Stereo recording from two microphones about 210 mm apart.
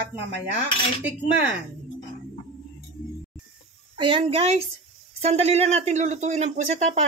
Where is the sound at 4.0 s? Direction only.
25° right (ahead or behind).